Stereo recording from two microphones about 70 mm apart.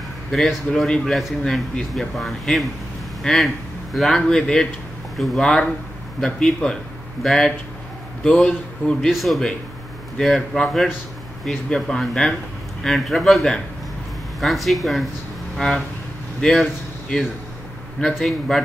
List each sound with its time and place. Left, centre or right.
0.3 s speech: centre
9.0 s speech: centre
18.0 s speech: centre